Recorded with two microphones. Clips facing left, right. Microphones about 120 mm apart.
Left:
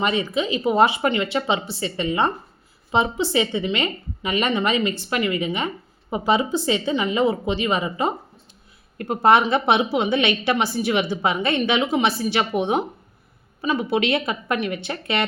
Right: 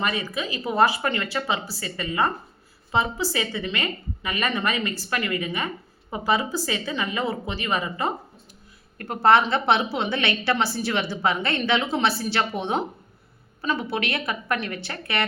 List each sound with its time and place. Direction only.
0.0 s a woman's voice: 25° left (ahead or behind)